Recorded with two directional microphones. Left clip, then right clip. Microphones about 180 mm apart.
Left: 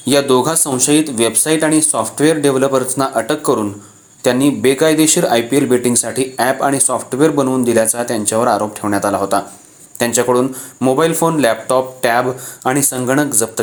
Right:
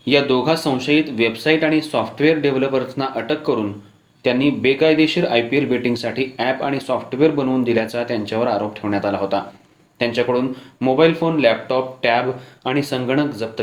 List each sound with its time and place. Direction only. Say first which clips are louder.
0.0 s speech: left 4 dB; 45° left (ahead or behind)